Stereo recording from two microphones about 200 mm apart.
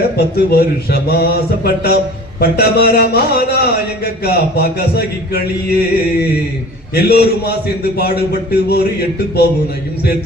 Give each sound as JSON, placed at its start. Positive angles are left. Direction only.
{"t": 0.2, "sound": "speech", "side_deg": 50}